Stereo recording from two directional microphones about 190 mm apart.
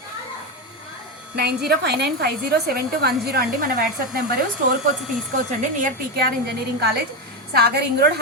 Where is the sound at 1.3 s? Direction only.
60° right (ahead or behind).